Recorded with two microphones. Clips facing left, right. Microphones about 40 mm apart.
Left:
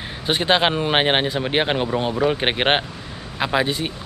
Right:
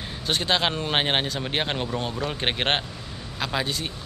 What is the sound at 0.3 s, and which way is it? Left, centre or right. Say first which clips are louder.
Speech: left 6 dB; left.